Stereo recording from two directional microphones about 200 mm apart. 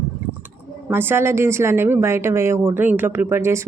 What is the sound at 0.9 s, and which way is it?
A woman's voice, 10° right (ahead or behind).